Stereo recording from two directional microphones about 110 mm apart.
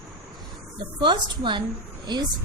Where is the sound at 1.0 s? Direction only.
45° right (ahead or behind).